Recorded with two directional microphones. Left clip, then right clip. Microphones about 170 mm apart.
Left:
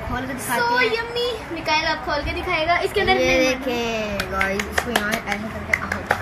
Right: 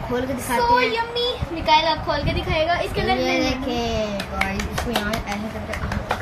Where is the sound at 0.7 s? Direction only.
Centre (ahead or behind).